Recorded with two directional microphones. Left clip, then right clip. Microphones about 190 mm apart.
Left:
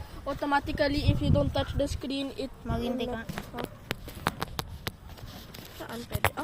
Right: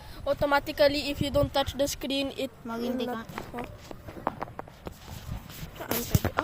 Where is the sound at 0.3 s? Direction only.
55° right (ahead or behind).